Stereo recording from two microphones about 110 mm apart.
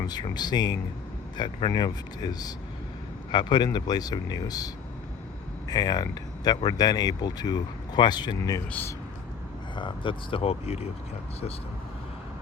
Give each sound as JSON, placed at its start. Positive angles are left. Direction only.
{"t": 0.0, "sound": "speech", "side_deg": 40}
{"t": 9.7, "sound": "speech", "side_deg": 50}